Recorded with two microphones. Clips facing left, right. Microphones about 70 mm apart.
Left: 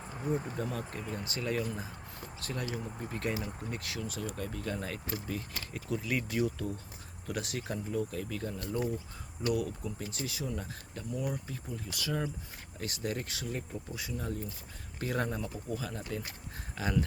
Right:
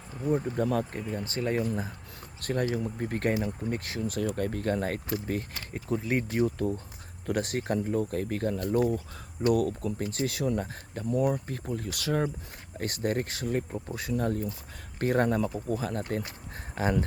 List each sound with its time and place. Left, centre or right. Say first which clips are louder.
0.5 s speech: right 9 dB; right
1.1 s speech: right 5 dB; right
5.7 s speech: right 5 dB; right
16.7 s speech: right 5 dB; right